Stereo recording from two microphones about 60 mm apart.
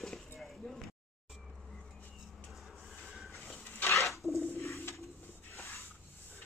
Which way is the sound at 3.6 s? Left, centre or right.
Left.